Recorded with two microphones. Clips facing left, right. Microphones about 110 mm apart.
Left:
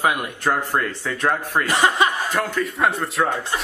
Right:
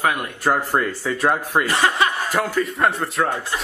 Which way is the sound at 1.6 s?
15° left (ahead or behind).